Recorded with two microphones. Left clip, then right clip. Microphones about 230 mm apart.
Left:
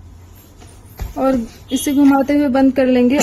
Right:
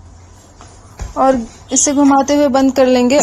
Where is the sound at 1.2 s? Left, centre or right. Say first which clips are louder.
Right 5 dB; centre.